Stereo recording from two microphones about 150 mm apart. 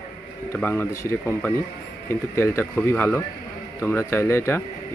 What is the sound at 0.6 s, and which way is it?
Speech, 15° left (ahead or behind).